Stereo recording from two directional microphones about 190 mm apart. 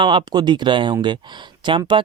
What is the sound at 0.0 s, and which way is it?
Speech, 25° right (ahead or behind).